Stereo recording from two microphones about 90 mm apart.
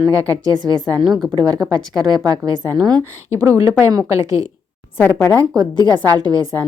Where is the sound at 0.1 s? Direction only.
40° right (ahead or behind).